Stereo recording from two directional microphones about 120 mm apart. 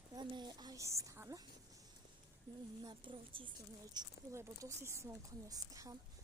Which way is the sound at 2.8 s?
40° right (ahead or behind).